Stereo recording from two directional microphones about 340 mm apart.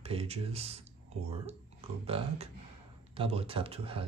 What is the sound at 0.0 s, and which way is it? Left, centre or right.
Speech, centre.